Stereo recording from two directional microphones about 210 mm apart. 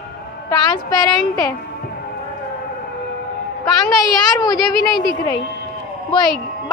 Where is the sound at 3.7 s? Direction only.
20° left (ahead or behind).